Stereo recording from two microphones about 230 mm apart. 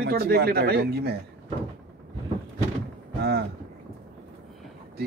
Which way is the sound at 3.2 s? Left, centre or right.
Right.